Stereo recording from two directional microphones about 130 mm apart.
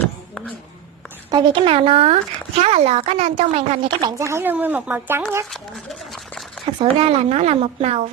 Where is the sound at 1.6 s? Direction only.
45° right (ahead or behind).